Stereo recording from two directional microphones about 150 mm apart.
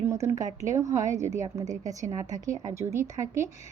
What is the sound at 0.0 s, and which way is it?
A woman's voice, 20° right (ahead or behind).